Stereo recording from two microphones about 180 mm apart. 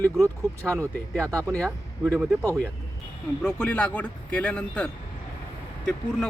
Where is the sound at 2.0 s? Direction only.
5° right (ahead or behind).